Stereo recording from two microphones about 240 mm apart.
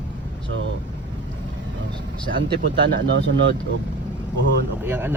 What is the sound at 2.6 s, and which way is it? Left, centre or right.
Speech, right.